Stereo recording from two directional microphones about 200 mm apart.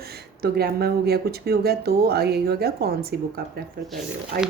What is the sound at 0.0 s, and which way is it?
A woman's voice, 50° right (ahead or behind).